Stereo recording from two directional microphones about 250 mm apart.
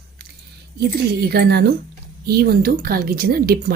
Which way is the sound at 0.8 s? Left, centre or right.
Right.